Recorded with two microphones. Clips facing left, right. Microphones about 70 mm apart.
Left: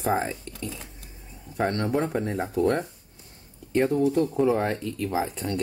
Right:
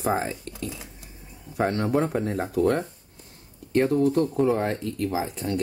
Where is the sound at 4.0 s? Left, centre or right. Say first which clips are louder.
Right 1 dB; right.